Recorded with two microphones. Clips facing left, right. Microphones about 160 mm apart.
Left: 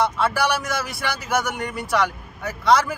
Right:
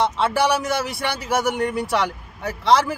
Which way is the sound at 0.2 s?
20° right (ahead or behind).